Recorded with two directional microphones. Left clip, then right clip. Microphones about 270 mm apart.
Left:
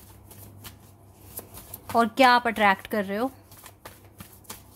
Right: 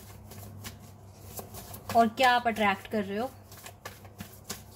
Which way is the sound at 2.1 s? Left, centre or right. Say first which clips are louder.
Left 5 dB; left.